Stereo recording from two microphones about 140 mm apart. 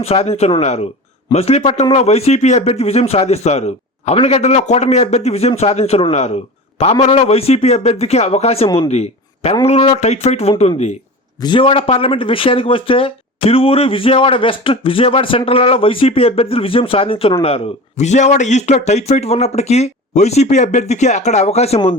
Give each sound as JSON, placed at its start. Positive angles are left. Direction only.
{"t": 0.0, "sound": "speech", "side_deg": 50}
{"t": 11.3, "sound": "speech", "side_deg": 35}